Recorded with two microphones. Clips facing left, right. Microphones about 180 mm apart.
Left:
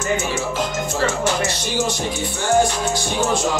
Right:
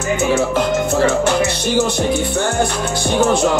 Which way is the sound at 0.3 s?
60° right (ahead or behind).